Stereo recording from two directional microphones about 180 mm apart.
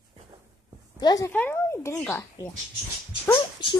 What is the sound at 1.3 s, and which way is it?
Speech, 10° left (ahead or behind).